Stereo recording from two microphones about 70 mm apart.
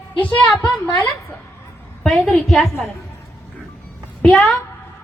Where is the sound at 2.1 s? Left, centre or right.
Centre.